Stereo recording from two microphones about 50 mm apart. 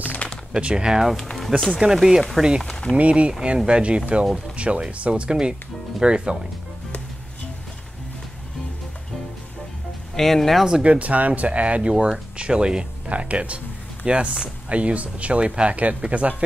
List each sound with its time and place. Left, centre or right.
0.0 s typing: left
0.6 s speech: centre
1.1 s speech: centre
1.7 s speech: centre
2.6 s speech: centre
3.0 s speech: right
10.1 s speech: centre
10.8 s speech: right